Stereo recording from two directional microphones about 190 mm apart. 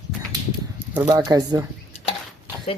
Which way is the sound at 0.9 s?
15° right (ahead or behind).